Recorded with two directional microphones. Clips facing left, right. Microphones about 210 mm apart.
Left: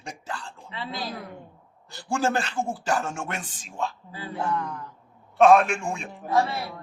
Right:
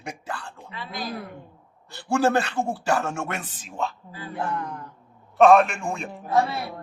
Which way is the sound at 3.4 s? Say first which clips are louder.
Right 1 dB; 60° right (ahead or behind).